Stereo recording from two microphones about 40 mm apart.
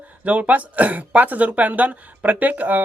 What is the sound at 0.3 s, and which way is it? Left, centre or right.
Speech, right.